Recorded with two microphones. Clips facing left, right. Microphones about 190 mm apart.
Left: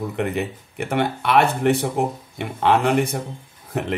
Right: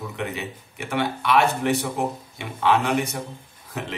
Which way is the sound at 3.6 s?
55° left (ahead or behind).